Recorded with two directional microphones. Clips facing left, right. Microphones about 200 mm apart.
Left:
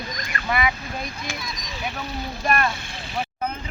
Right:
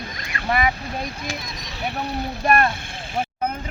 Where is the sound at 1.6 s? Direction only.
60° right (ahead or behind).